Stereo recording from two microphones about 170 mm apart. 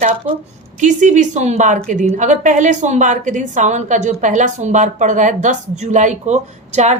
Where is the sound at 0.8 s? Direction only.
45° right (ahead or behind).